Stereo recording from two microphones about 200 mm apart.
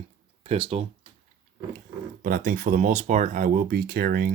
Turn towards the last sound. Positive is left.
turn(degrees=-50)  # may be behind; listen again after turning